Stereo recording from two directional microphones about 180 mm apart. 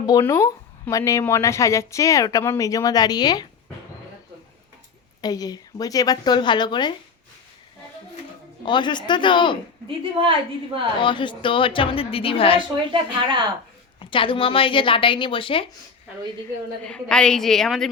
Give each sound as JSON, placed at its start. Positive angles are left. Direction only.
{"t": 0.0, "sound": "speech", "side_deg": 20}
{"t": 5.2, "sound": "a woman's voice", "side_deg": 20}
{"t": 8.6, "sound": "a woman's voice", "side_deg": 25}
{"t": 9.8, "sound": "a woman's voice", "side_deg": -30}
{"t": 11.0, "sound": "a woman's voice", "side_deg": 25}
{"t": 12.9, "sound": "a woman's voice", "side_deg": -25}
{"t": 14.0, "sound": "a woman's voice", "side_deg": 30}
{"t": 16.8, "sound": "a woman's voice", "side_deg": 5}